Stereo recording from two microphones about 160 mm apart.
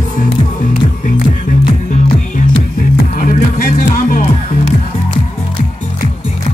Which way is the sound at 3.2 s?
55° left (ahead or behind).